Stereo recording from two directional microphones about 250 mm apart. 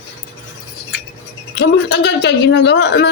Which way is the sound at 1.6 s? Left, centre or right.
Left.